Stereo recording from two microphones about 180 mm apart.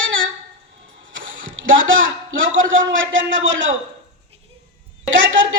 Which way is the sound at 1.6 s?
90° right.